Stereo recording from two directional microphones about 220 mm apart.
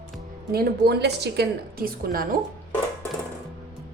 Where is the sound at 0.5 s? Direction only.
45° right (ahead or behind).